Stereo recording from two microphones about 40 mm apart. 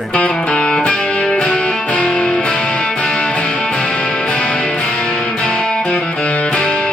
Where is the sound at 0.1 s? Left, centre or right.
Left.